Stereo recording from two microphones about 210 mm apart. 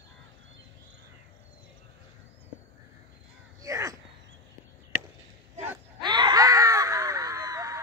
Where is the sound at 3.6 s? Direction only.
15° right (ahead or behind).